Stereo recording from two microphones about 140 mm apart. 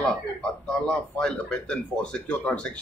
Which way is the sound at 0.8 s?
5° left (ahead or behind).